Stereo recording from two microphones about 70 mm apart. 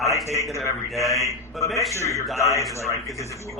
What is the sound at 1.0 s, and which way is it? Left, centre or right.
Speech, left.